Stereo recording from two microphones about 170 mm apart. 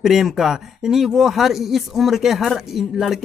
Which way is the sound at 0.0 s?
Centre (ahead or behind).